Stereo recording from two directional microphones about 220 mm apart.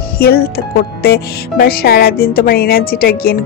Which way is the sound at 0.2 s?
45° left (ahead or behind).